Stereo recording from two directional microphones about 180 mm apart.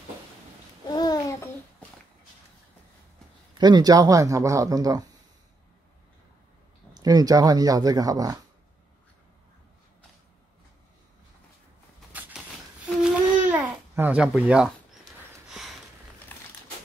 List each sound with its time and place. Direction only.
0.8 s babbling: 20° left (ahead or behind)
3.5 s speech: 25° right (ahead or behind)
6.9 s speech: 20° right (ahead or behind)
13.0 s babbling: 5° right (ahead or behind)
15.5 s a sound: centre (ahead or behind)
16.3 s a sound: 10° left (ahead or behind)